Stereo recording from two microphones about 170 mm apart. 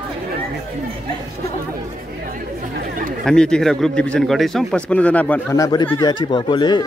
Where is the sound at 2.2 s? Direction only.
60° right (ahead or behind).